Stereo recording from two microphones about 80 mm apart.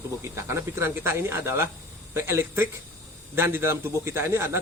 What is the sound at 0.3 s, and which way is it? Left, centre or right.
A man's voice, right.